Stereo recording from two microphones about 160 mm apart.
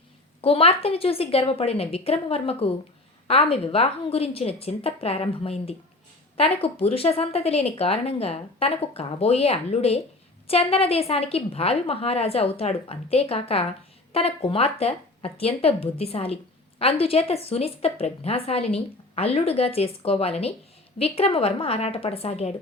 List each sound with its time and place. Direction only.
0.4 s speech: 35° left (ahead or behind)